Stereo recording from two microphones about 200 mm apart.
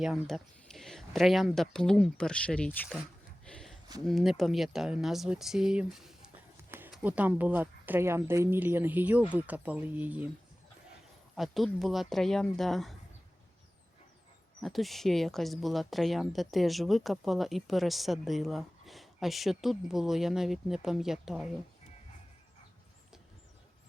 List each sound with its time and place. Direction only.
0.0 s speech: centre (ahead or behind)
3.4 s a sound: 5° left (ahead or behind)
4.0 s speech: centre (ahead or behind)
11.3 s speech: centre (ahead or behind)
14.6 s speech: centre (ahead or behind)